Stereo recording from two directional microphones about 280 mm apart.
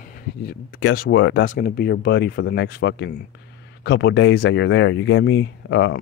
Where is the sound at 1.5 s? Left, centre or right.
Left.